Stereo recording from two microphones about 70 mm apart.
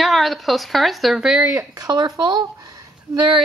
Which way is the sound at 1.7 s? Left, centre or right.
Right.